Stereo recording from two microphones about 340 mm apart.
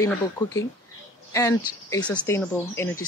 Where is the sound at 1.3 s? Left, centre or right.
Centre.